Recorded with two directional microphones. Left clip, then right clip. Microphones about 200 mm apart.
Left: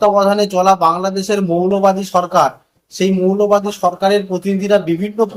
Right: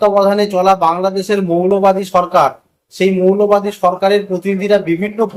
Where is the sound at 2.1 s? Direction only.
Centre (ahead or behind).